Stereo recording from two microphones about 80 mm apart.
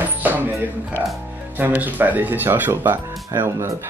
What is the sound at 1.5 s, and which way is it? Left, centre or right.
Speech, right.